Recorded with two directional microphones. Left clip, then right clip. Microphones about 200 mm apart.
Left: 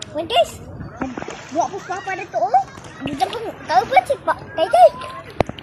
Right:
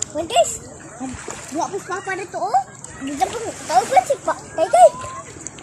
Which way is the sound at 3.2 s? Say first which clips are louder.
Even; 10° right (ahead or behind).